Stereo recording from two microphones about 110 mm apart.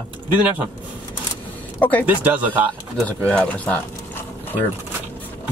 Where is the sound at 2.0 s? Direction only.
15° right (ahead or behind).